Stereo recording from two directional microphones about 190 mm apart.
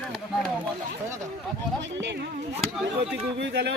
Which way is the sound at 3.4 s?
65° right (ahead or behind).